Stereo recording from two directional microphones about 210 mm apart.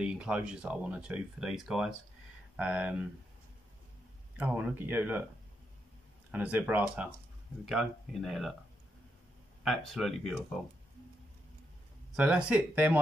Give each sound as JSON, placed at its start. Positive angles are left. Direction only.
{"t": 0.0, "sound": "speech", "side_deg": -5}
{"t": 4.4, "sound": "speech", "side_deg": -5}
{"t": 6.3, "sound": "speech", "side_deg": -5}
{"t": 9.7, "sound": "speech", "side_deg": 0}
{"t": 12.1, "sound": "speech", "side_deg": -5}